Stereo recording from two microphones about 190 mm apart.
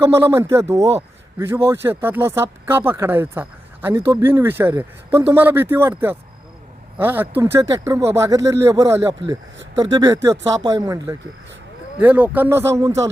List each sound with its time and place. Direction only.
0.0 s speech: 15° right (ahead or behind)